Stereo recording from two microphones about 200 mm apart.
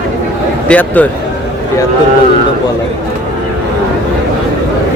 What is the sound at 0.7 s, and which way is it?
Speech, 10° left (ahead or behind).